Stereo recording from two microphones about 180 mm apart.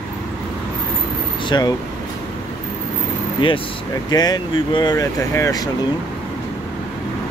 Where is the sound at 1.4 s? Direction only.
25° left (ahead or behind).